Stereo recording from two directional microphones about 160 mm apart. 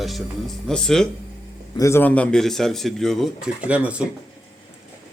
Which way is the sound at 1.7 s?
20° left (ahead or behind).